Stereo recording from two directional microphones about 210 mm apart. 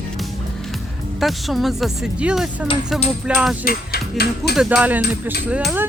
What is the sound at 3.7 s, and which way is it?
Speech, 45° left (ahead or behind).